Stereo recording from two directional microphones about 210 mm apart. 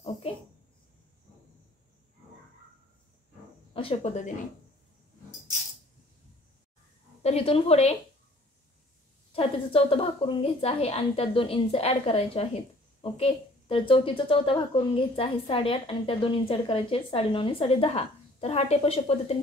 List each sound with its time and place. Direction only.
3.7 s speech: 25° left (ahead or behind)
7.2 s a woman's voice: 30° left (ahead or behind)
9.3 s a woman's voice: 25° left (ahead or behind)